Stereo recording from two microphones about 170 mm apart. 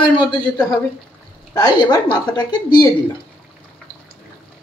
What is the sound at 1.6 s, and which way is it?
Speech, 25° left (ahead or behind).